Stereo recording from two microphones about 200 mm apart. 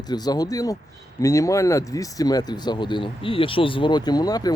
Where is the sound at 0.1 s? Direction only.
20° left (ahead or behind).